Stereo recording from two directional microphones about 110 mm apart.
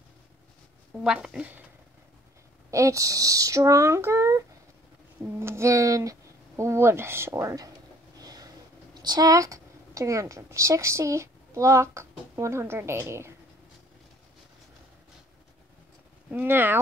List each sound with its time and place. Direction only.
1.0 s speech: 5° right (ahead or behind)
2.7 s speech: 30° right (ahead or behind)
8.2 s a sound: 35° right (ahead or behind)
9.0 s a woman's voice: 35° right (ahead or behind)
16.3 s speech: 15° right (ahead or behind)